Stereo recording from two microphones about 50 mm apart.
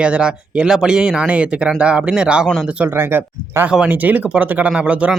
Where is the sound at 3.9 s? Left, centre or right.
Right.